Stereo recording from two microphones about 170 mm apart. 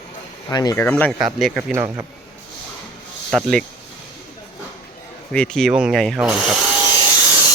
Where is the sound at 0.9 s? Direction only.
10° left (ahead or behind).